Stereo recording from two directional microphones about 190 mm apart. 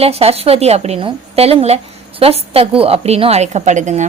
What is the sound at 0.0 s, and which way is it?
A woman's voice, 30° right (ahead or behind).